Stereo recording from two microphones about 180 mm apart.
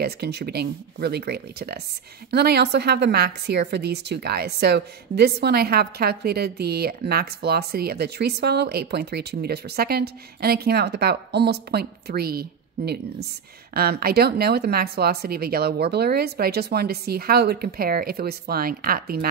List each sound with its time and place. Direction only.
0.0 s a woman's voice: 65° right (ahead or behind)